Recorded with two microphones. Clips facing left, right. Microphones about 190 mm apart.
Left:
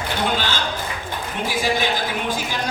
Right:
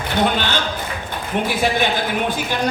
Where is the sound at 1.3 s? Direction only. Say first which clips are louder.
Right 4 dB; 60° right (ahead or behind).